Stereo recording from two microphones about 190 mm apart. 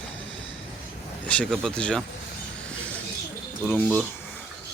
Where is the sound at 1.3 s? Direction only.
5° left (ahead or behind).